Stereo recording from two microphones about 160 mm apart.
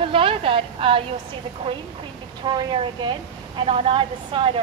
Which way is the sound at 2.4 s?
30° right (ahead or behind).